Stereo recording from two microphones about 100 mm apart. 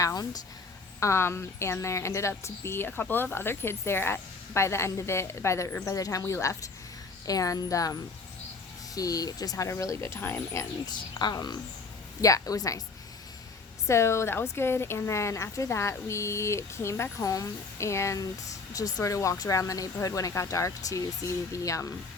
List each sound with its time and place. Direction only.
0.0 s speech: 40° left (ahead or behind)
0.9 s speech: 30° left (ahead or behind)
9.0 s speech: 35° left (ahead or behind)
11.2 s speech: 45° left (ahead or behind)
13.8 s speech: 30° left (ahead or behind)